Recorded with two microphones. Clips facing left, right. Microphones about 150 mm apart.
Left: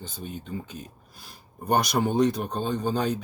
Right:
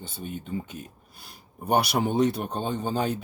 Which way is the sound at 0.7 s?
5° right (ahead or behind).